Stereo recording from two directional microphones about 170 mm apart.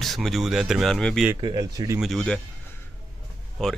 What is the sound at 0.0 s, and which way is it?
Speech, centre (ahead or behind).